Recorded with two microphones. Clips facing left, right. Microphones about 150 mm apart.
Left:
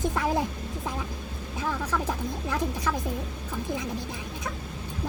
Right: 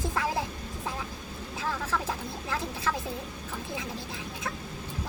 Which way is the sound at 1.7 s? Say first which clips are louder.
Left 2 dB; 15° left (ahead or behind).